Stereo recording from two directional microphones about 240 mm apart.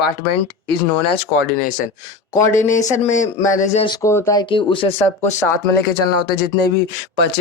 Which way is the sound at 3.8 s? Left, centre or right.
Centre.